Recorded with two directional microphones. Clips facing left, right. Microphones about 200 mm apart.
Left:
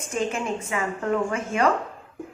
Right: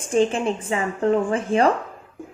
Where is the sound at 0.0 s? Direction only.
30° right (ahead or behind).